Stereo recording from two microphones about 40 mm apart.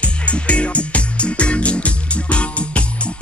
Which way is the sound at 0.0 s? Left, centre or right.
Left.